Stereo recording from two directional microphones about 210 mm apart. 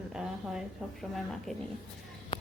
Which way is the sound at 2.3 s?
20° left (ahead or behind).